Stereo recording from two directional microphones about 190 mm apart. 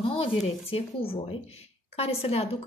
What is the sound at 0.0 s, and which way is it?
A woman's voice, 30° left (ahead or behind).